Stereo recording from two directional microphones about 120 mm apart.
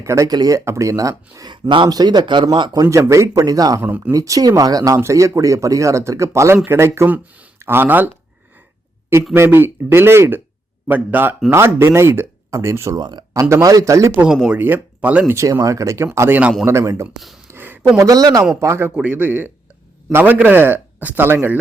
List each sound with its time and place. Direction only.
0.0 s speech: 25° right (ahead or behind)
2.8 s speech: 25° right (ahead or behind)
3.8 s a man's voice: 15° right (ahead or behind)
4.1 s speech: 30° right (ahead or behind)
9.3 s a man's voice: 20° right (ahead or behind)
13.0 s speech: 40° right (ahead or behind)
14.3 s a man's voice: 5° right (ahead or behind)
15.4 s speech: 25° right (ahead or behind)
16.4 s a man's voice: 5° right (ahead or behind)
16.6 s speech: 25° right (ahead or behind)
17.5 s a sound: 15° right (ahead or behind)
17.9 s speech: 30° right (ahead or behind)
18.9 s a man's voice: 10° right (ahead or behind)